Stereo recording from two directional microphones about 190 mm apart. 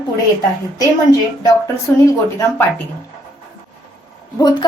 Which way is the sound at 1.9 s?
10° left (ahead or behind).